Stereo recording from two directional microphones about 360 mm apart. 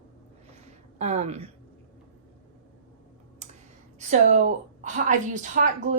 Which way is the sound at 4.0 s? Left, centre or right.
Centre.